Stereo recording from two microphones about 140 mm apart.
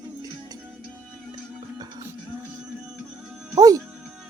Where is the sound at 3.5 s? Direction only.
25° right (ahead or behind).